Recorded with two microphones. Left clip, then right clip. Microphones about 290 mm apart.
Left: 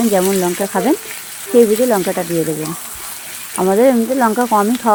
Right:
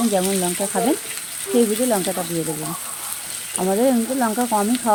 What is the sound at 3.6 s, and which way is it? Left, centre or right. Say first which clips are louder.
Speech: left 7 dB; left.